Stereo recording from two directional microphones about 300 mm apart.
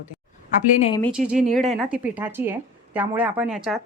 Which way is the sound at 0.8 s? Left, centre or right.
Centre.